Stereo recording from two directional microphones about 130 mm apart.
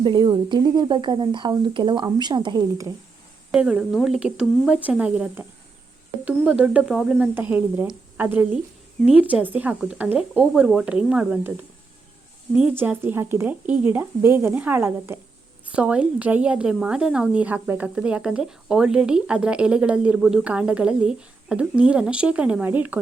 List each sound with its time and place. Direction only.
0.0 s speech: 35° right (ahead or behind)
3.5 s a woman's voice: 5° right (ahead or behind)
12.5 s a woman's voice: 15° right (ahead or behind)